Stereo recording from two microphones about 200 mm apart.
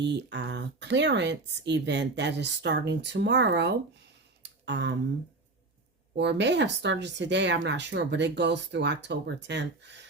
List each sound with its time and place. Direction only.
0.0 s speech: 60° right (ahead or behind)
4.4 s a sound: 60° right (ahead or behind)
6.1 s speech: 60° right (ahead or behind)